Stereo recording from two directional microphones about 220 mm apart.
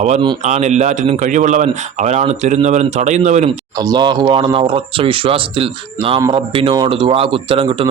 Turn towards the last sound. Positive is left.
turn(degrees=-25)  # may be behind; listen again after turning